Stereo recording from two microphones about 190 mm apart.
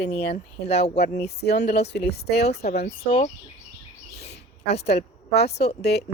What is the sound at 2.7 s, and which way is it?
Speech, 55° left (ahead or behind).